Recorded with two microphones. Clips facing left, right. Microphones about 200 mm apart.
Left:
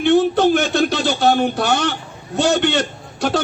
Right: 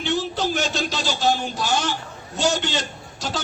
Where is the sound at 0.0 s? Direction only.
55° left (ahead or behind).